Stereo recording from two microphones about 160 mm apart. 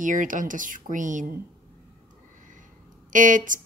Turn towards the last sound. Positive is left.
turn(degrees=-55)  # may be behind; listen again after turning